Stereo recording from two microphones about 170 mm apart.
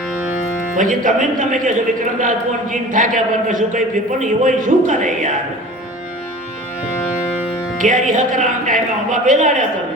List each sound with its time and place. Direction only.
0.8 s a man's voice: 50° right (ahead or behind)
7.8 s a man's voice: 50° right (ahead or behind)